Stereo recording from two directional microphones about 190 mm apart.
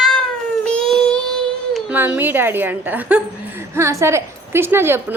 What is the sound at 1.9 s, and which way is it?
A woman's voice, 10° right (ahead or behind).